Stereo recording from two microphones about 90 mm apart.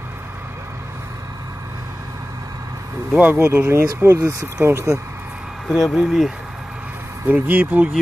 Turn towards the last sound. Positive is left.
turn(degrees=-20)  # may be behind; listen again after turning